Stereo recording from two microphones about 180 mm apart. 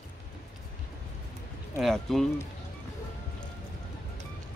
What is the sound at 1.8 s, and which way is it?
Speech, centre (ahead or behind).